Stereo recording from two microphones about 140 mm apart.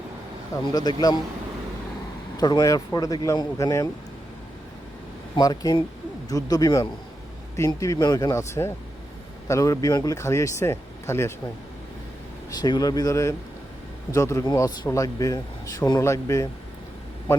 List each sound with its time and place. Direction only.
0.7 s speech: 30° left (ahead or behind)
2.4 s speech: 30° left (ahead or behind)
5.4 s speech: 25° left (ahead or behind)
12.5 s speech: 30° left (ahead or behind)